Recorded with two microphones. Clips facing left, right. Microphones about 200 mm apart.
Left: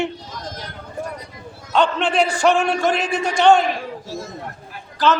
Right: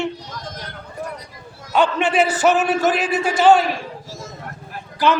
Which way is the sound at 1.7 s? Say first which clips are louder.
Right 1 dB; 5° right (ahead or behind).